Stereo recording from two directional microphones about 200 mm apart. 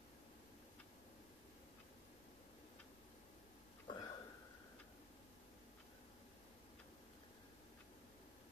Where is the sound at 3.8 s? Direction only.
20° left (ahead or behind).